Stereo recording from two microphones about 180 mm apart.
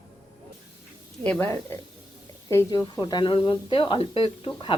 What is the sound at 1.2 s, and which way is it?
A woman's voice, 10° left (ahead or behind).